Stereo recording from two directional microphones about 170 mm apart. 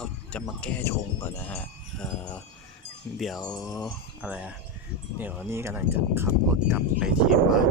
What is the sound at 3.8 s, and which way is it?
Speech, 5° right (ahead or behind).